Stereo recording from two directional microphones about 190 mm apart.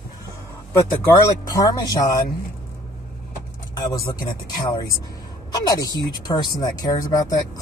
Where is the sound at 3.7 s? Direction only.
20° left (ahead or behind).